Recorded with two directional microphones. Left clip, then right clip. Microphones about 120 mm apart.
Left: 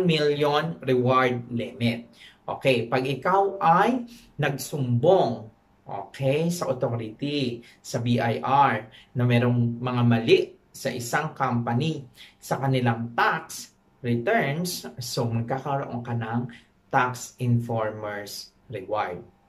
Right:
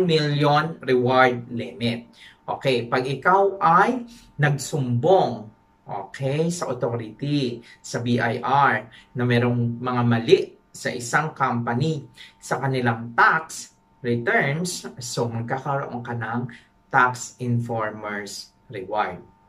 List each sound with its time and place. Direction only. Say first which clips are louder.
0.0 s speech: right 2 dB; 15° left (ahead or behind)